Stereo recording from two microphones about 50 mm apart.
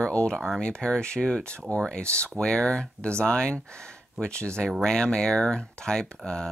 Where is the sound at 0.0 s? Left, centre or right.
Centre.